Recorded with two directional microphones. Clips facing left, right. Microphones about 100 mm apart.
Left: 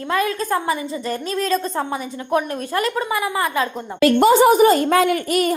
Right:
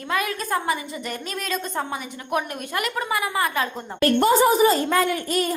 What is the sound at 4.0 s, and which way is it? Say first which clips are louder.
A woman's voice: left 5 dB; 90° left.